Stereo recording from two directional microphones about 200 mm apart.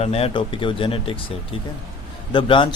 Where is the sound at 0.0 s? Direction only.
30° left (ahead or behind).